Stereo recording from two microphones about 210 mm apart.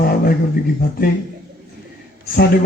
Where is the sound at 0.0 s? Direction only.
45° left (ahead or behind).